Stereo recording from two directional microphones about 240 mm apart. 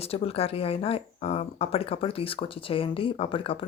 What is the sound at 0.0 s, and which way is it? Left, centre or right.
Speech, left.